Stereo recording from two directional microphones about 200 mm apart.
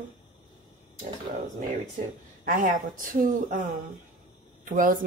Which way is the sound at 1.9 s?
45° right (ahead or behind).